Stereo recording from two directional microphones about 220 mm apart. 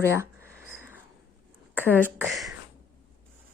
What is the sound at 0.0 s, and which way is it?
Speech, 10° right (ahead or behind).